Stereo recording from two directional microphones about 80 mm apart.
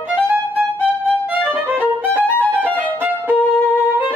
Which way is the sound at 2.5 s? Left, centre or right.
Right.